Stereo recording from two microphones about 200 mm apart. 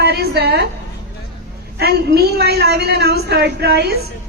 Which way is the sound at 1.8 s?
50° right (ahead or behind).